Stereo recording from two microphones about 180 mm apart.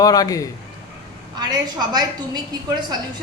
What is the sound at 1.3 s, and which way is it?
A woman's voice, 25° right (ahead or behind).